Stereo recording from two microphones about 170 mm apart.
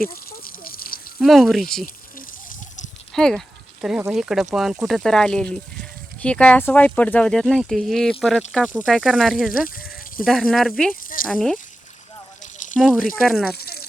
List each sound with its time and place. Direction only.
0.0 s a sound: 60° left (ahead or behind)
1.2 s speech: centre (ahead or behind)
2.1 s water: 50° left (ahead or behind)
3.1 s sheep: 5° left (ahead or behind)
4.1 s speech: centre (ahead or behind)
9.6 s sheep: 55° left (ahead or behind)
10.2 s speech: centre (ahead or behind)
13.1 s speech: centre (ahead or behind)
13.6 s a sound: 65° left (ahead or behind)